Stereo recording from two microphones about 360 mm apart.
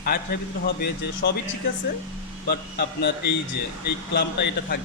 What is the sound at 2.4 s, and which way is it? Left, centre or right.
Speech, left.